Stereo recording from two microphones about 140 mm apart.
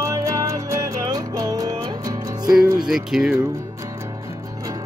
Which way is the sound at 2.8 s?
5° right (ahead or behind).